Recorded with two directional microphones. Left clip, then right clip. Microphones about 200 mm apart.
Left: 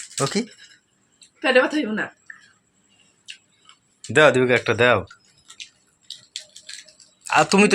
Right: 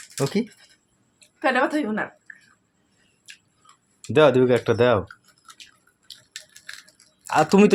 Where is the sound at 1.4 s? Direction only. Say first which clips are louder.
Left 3 dB; 15° right (ahead or behind).